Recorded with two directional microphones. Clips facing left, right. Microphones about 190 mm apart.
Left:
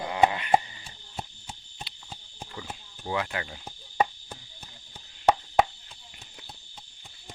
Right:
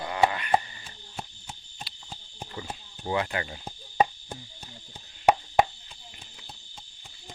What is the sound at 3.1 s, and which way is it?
Cricket, centre (ahead or behind).